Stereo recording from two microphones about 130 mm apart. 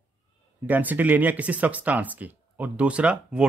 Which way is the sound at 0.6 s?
15° right (ahead or behind).